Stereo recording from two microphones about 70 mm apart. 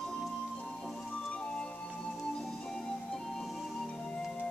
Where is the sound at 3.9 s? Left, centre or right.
Centre.